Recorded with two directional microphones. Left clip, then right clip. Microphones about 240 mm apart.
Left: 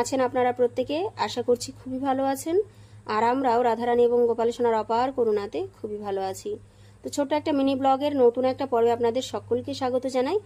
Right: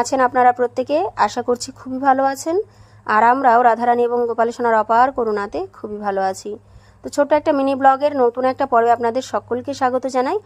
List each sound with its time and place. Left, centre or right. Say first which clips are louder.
0.0 s speech: right 9 dB; right